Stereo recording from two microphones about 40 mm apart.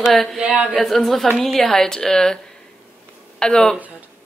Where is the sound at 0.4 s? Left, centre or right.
Right.